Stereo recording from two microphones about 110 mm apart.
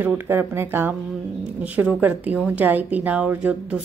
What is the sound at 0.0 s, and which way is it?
A woman's voice, 20° right (ahead or behind).